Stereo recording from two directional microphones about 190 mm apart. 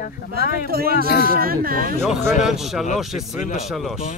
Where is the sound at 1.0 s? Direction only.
55° left (ahead or behind).